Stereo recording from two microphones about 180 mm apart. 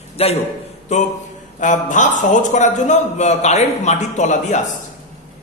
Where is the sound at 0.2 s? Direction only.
35° left (ahead or behind).